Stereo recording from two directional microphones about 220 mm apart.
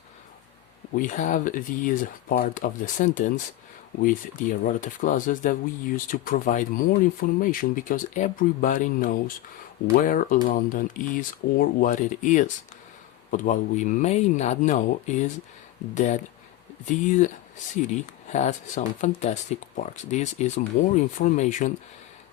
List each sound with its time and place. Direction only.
0.9 s speech: 35° left (ahead or behind)